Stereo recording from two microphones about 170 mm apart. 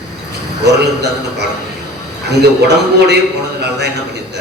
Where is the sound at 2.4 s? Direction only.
80° right.